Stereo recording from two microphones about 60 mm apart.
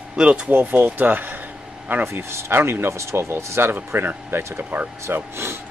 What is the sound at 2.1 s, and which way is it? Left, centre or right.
Speech, right.